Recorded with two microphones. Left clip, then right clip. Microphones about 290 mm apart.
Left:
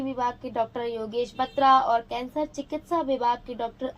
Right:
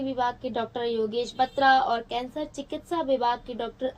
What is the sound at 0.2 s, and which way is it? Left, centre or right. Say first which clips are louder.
Speech: left 1 dB; centre.